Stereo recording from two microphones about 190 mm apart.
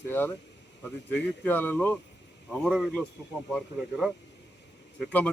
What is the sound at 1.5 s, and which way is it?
Speech, 10° left (ahead or behind).